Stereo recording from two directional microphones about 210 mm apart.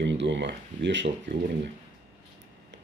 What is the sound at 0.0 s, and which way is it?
Speech, 60° right (ahead or behind).